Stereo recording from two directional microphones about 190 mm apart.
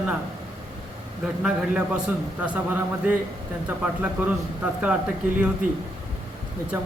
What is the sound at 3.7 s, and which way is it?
A man's voice, 10° right (ahead or behind).